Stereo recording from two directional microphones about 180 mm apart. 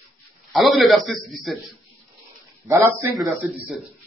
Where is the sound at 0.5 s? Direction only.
Centre (ahead or behind).